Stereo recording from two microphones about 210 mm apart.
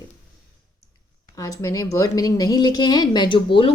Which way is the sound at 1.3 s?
15° left (ahead or behind).